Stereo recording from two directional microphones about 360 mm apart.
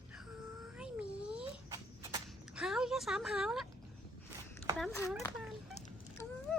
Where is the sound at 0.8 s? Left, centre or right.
Centre.